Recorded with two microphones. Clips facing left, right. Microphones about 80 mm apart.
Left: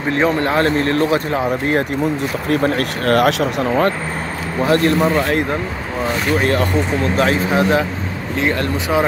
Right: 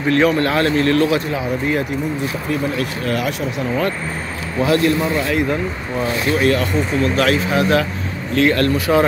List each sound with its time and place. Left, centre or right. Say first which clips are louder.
0.1 s speech: right 1 dB; left
1.4 s speech: left 2 dB; left
2.5 s speech: left 5 dB; left
4.6 s speech: left 1 dB; left
6.3 s speech: even; left; by 9.0 s centre